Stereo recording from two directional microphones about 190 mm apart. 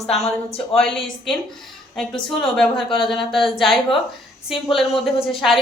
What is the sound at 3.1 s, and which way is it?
Speech, centre (ahead or behind).